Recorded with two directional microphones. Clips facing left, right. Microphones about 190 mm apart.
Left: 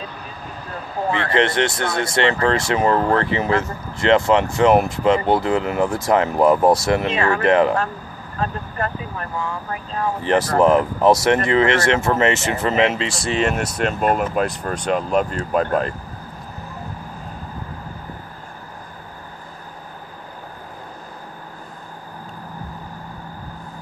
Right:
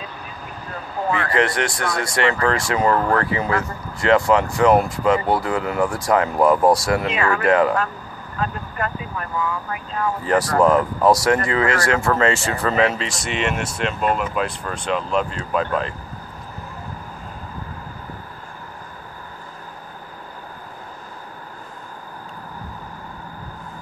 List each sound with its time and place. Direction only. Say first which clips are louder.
1.1 s speech: left 2 dB; 25° left (ahead or behind); by 15.9 s 45° left (ahead or behind)